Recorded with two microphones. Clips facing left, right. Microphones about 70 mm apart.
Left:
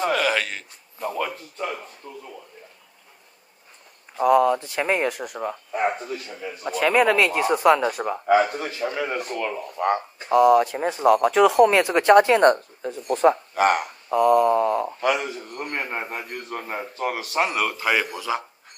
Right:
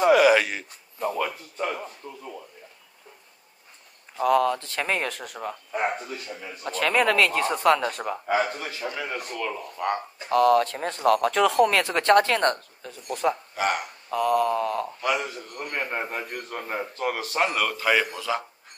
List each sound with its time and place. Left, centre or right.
0.0 s a sound: centre
0.9 s speech: centre
4.2 s speech: centre
6.6 s speech: centre
8.3 s a man's voice: left
10.3 s speech: centre; by 13.4 s left
13.6 s speech: left
14.0 s a man's voice: centre